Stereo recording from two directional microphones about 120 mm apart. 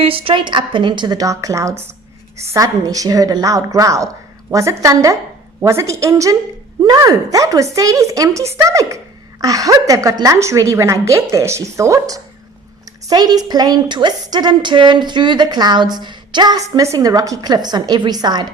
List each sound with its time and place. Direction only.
0.0 s a woman's voice: 50° right (ahead or behind)